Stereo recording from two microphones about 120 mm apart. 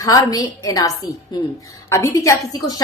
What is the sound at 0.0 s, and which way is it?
A woman's voice, 30° left (ahead or behind).